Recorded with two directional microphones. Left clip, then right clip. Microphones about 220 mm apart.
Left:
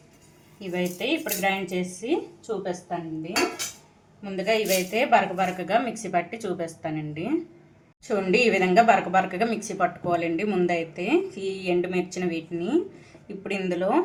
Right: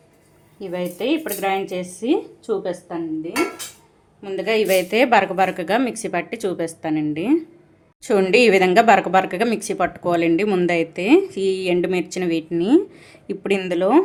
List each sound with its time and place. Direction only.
0.7 s speech: 35° right (ahead or behind)
4.2 s speech: 45° right (ahead or behind)